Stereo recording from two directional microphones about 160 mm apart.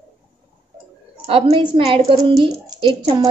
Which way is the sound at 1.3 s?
35° right (ahead or behind).